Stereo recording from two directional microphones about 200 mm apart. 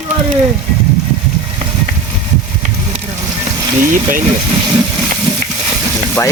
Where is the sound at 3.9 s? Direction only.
40° right (ahead or behind).